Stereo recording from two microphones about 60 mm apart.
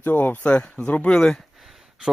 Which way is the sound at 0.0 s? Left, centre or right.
Left.